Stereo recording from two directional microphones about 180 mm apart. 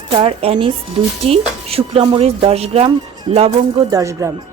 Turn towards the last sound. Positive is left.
turn(degrees=-20)  # may be behind; listen again after turning